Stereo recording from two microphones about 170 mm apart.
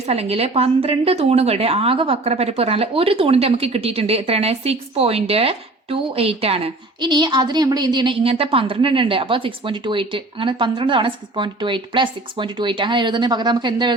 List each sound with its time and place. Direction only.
0.0 s speech: 35° right (ahead or behind)